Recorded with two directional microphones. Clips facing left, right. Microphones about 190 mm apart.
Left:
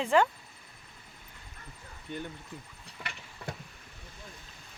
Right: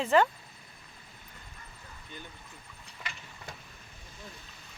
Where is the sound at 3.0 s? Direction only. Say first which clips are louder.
Left 2 dB; 60° left (ahead or behind).